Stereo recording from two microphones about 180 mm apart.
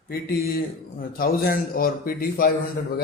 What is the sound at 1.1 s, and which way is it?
A man's voice, 55° left (ahead or behind).